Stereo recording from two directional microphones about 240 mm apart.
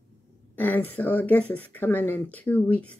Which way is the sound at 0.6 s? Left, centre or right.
Centre.